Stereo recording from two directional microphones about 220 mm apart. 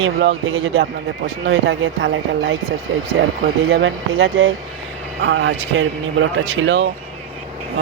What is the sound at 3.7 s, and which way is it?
Speech, 55° right (ahead or behind).